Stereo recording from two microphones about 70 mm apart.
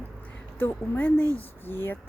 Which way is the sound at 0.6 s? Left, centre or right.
Left.